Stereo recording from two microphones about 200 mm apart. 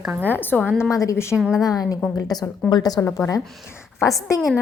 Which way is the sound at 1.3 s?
5° right (ahead or behind).